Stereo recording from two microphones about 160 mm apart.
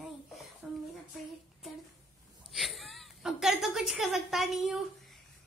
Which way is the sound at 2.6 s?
Centre (ahead or behind).